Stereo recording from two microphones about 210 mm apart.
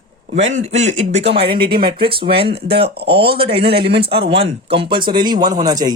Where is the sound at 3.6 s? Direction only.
50° right (ahead or behind).